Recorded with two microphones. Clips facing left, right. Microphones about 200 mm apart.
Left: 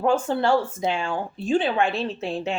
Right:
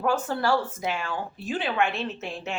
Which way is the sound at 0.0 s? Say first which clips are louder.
Left 4 dB; 25° left (ahead or behind).